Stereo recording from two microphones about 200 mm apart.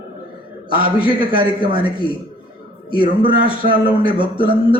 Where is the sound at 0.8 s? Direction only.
25° left (ahead or behind).